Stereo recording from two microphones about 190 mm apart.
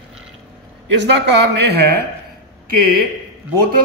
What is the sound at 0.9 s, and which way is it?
A man's voice, 65° right (ahead or behind).